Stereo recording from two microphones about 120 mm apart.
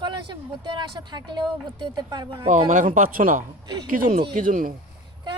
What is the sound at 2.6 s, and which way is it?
Speech, 90° right.